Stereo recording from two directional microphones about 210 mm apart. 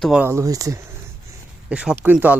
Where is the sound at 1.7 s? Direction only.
5° right (ahead or behind).